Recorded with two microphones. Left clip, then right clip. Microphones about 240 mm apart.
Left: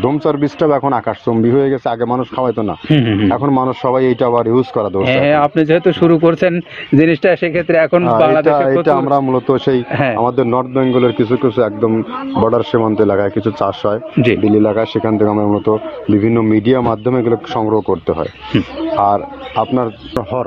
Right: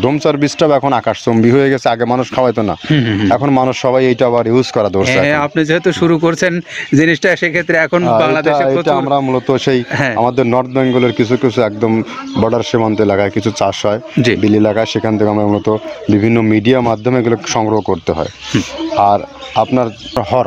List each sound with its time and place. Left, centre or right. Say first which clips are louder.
0.0 s speech: right 2 dB; right
2.9 s speech: left 4 dB; right
3.3 s speech: right 6 dB; right
5.0 s speech: left 1 dB; right
9.9 s speech: right 1 dB; right
10.2 s speech: right 1 dB; right